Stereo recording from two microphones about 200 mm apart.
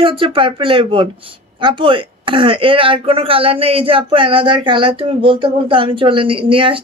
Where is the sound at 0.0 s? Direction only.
25° right (ahead or behind).